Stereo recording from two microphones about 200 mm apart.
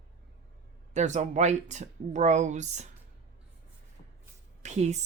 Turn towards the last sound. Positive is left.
turn(degrees=-35)  # may be behind; listen again after turning